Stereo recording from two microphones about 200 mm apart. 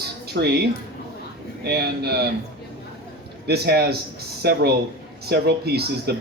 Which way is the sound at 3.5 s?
50° right (ahead or behind).